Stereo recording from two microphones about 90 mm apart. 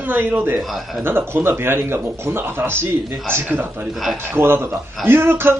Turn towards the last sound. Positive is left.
turn(degrees=-25)  # may be behind; listen again after turning